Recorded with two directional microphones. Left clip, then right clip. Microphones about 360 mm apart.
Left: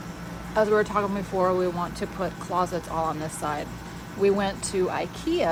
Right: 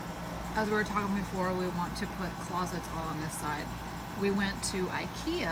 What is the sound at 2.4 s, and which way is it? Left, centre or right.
Speech, right.